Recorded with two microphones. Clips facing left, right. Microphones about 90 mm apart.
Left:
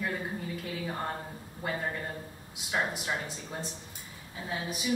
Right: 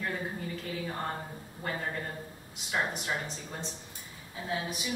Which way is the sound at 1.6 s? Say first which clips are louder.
Left 1 dB; 5° left (ahead or behind).